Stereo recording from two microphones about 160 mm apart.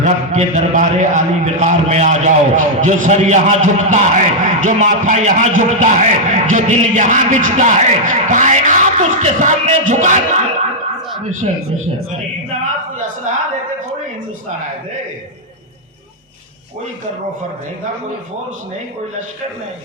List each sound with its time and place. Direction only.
0.0 s speech: 45° right (ahead or behind)